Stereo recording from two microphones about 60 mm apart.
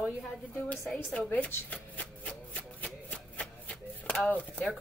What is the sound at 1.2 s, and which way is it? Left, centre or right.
Shuffling cards, left.